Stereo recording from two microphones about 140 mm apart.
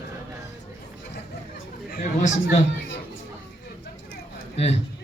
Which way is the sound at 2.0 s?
60° left (ahead or behind).